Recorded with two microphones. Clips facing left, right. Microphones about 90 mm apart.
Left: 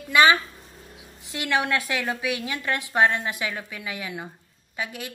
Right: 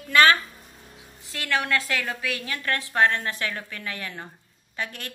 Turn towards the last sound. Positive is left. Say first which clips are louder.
# left 1 dB
turn(degrees=10)  # may be behind; listen again after turning